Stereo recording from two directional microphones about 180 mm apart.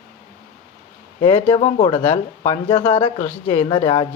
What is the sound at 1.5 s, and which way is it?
Speech, 30° left (ahead or behind).